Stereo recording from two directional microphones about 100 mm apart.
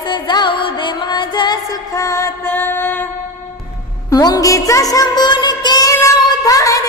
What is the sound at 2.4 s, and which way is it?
Music, 20° left (ahead or behind).